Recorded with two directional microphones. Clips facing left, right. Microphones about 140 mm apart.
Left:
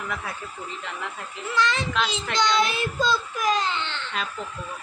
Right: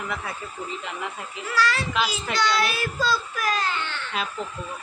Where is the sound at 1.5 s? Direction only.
20° left (ahead or behind).